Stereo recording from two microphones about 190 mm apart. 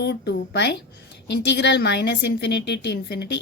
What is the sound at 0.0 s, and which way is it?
A woman's voice, 60° left (ahead or behind).